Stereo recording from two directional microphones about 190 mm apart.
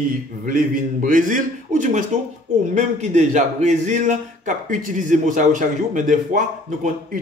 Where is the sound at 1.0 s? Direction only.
45° right (ahead or behind).